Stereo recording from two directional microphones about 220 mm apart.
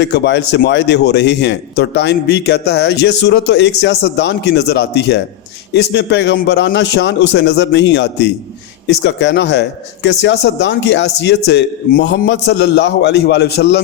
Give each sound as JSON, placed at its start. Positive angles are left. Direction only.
{"t": 0.0, "sound": "a man's voice", "side_deg": 55}